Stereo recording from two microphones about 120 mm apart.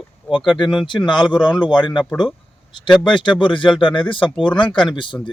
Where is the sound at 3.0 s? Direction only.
40° left (ahead or behind).